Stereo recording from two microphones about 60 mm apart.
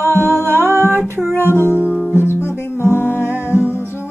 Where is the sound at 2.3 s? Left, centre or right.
Left.